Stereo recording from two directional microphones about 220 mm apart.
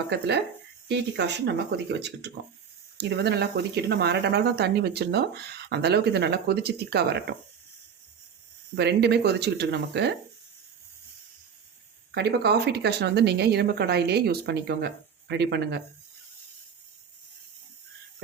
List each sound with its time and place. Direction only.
0.1 s speech: 50° right (ahead or behind)
8.7 s speech: 50° right (ahead or behind)
12.1 s speech: 50° right (ahead or behind)